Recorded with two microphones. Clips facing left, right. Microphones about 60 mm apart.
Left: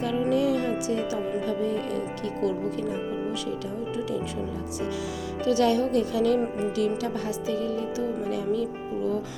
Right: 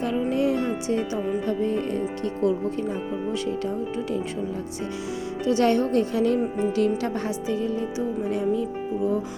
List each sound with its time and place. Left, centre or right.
0.3 s music: right
1.5 s speech: right
5.5 s a woman's voice: right
6.4 s speech: centre
6.7 s speech: right